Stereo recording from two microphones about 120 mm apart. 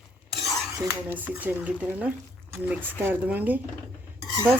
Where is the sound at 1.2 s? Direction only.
15° right (ahead or behind).